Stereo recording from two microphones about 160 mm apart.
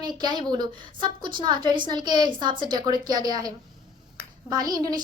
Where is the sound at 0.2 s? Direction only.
25° right (ahead or behind).